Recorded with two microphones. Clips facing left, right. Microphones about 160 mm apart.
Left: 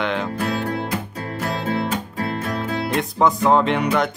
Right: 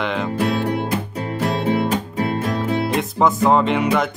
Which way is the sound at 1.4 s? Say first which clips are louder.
Right 4 dB; 20° right (ahead or behind).